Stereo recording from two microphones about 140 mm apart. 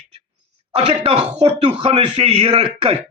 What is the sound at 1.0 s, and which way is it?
Speech, 45° right (ahead or behind).